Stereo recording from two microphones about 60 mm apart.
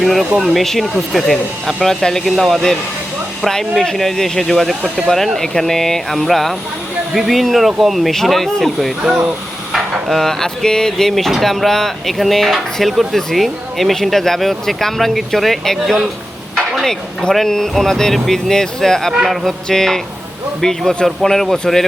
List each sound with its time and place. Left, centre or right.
0.0 s speech: centre
9.0 s speech: centre
9.7 s speech: centre